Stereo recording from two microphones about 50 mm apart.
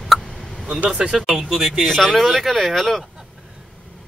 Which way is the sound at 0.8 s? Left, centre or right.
Centre.